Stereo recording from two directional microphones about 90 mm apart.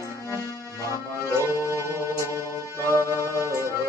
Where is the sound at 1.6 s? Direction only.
30° right (ahead or behind).